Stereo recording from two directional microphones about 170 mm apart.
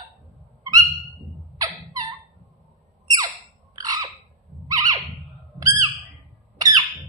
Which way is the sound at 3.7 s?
20° right (ahead or behind).